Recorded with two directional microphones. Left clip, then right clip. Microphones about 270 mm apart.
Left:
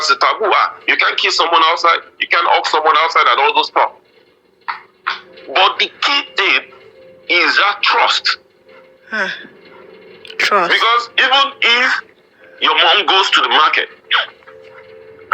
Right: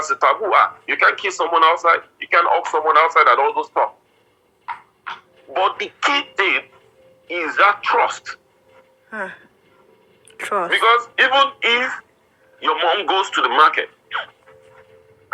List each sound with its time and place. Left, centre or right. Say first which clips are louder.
0.0 s speech: left 4 dB; left
5.5 s speech: left 7 dB; left